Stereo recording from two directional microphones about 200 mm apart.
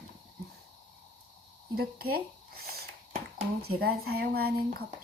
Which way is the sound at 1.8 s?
50° right (ahead or behind).